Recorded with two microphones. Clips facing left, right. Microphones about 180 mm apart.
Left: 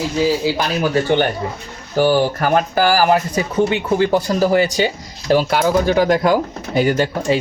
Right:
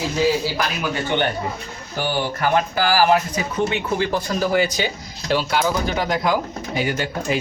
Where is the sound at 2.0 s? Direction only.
45° left (ahead or behind).